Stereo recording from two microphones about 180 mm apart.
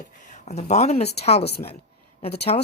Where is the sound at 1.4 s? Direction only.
65° left (ahead or behind).